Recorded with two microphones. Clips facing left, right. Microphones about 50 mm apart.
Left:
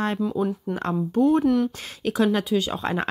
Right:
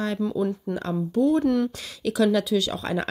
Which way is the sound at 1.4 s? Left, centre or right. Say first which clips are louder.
Left 1 dB; centre.